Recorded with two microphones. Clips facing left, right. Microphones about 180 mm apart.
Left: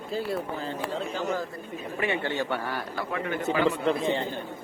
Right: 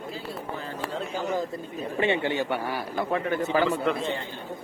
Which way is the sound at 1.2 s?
15° right (ahead or behind).